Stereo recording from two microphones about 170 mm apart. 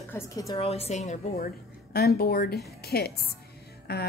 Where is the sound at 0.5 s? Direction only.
35° left (ahead or behind).